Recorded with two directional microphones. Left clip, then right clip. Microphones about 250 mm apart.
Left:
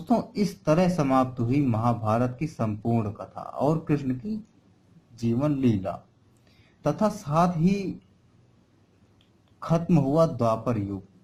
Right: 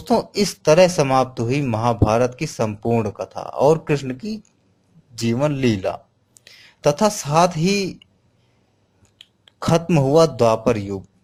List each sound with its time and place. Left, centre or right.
0.1 s speech: right
9.6 s speech: right